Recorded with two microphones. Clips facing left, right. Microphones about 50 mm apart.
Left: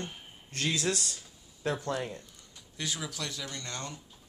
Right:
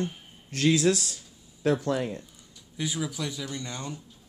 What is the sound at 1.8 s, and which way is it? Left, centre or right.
Speech, centre.